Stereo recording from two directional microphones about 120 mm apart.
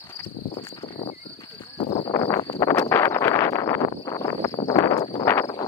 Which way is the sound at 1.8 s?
70° left (ahead or behind).